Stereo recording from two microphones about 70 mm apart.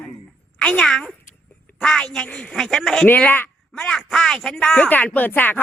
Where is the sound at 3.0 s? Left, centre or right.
Left.